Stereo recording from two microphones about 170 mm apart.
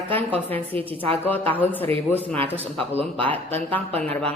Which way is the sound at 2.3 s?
35° right (ahead or behind).